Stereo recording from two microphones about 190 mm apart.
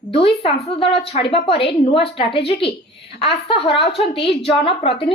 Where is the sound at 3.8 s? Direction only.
65° left (ahead or behind).